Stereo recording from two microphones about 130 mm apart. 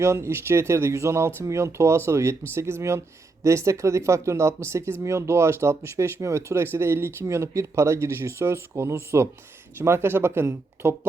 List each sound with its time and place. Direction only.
0.0 s speech: 20° right (ahead or behind)